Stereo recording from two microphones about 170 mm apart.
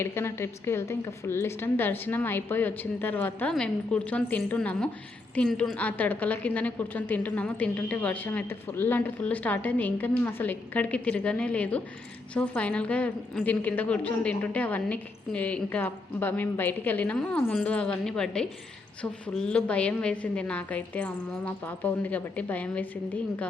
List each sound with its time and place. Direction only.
0.0 s a woman's voice: 15° left (ahead or behind)